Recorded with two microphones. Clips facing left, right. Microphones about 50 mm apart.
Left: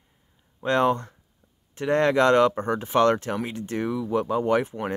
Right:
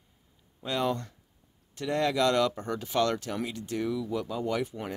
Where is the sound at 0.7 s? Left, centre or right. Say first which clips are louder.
Left 8 dB; left.